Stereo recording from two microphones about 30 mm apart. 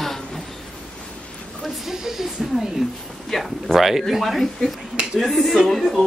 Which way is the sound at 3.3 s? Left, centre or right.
Centre.